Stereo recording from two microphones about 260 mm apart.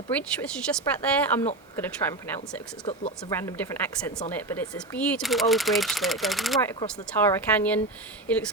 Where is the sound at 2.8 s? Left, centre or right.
Left.